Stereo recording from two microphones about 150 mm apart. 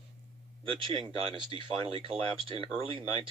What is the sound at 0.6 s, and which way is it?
Speech, 35° right (ahead or behind).